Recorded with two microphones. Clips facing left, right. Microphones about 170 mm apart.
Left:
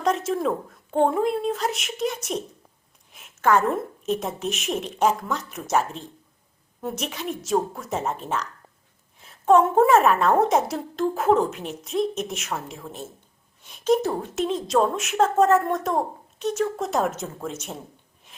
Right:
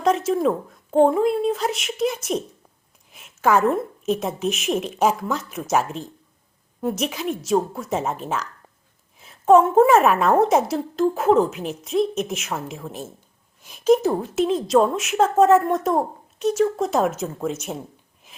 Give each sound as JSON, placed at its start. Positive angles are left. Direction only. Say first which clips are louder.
{"t": 0.0, "sound": "a woman's voice", "louder": "right 4 dB", "side_deg": 0}
{"t": 7.0, "sound": "a woman's voice", "louder": "right 5 dB", "side_deg": -5}